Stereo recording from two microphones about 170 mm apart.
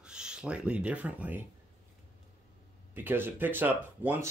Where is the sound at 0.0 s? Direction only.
5° right (ahead or behind).